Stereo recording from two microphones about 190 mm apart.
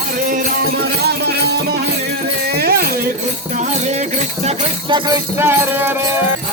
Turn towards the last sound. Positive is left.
turn(degrees=-10)  # may be behind; listen again after turning